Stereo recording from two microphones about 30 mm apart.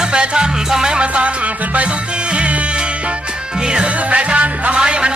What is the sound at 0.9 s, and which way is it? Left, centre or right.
Music, right.